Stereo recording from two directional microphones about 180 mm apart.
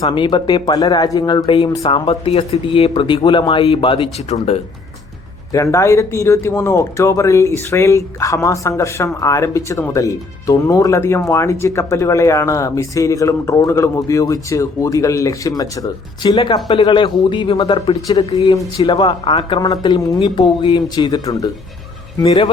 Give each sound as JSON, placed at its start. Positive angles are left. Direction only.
{"t": 0.0, "sound": "speech", "side_deg": 25}
{"t": 5.5, "sound": "speech", "side_deg": 15}